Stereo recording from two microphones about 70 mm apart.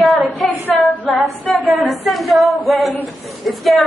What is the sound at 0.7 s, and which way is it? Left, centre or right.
Female singing, centre.